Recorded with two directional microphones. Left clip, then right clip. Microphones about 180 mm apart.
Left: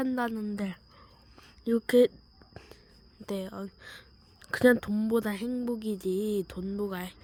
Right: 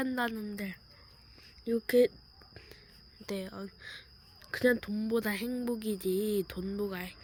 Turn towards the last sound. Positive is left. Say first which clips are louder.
# left 2 dB
turn(degrees=25)  # may be behind; listen again after turning